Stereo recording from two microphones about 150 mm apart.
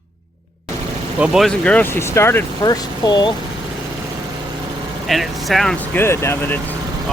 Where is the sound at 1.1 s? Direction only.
5° right (ahead or behind); by 3.4 s 30° left (ahead or behind).